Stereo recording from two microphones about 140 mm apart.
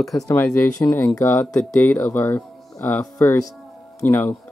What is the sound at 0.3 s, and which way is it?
Speech, 15° left (ahead or behind).